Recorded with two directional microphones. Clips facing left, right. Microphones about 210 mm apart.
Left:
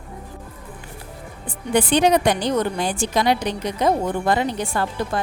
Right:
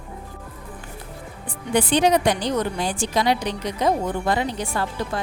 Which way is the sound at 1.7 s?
55° left (ahead or behind).